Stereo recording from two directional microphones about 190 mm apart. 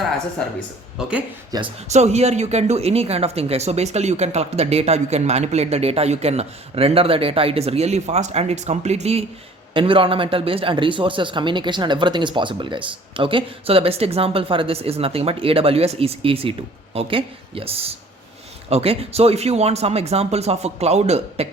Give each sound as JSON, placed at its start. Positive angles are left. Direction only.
{"t": 0.9, "sound": "speech", "side_deg": -5}
{"t": 1.5, "sound": "a man's voice", "side_deg": -20}
{"t": 1.9, "sound": "a man's voice", "side_deg": -35}